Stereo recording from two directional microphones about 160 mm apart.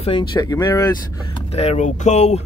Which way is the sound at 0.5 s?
20° left (ahead or behind).